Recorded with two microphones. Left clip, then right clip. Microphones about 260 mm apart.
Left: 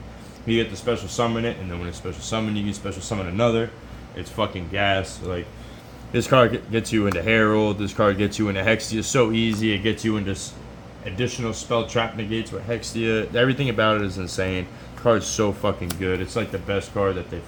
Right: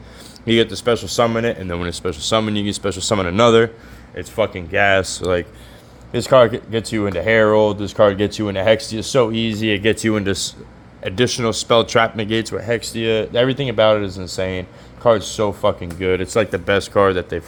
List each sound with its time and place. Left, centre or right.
0.4 s speech: right
4.2 s speech: right
6.1 s speech: centre; by 17.2 s right